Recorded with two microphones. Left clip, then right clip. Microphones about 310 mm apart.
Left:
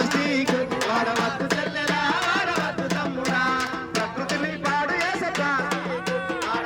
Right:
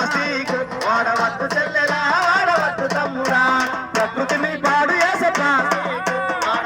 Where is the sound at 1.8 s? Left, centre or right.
Centre.